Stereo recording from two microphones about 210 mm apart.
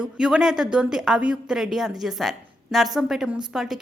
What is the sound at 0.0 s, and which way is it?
Speech, 5° right (ahead or behind).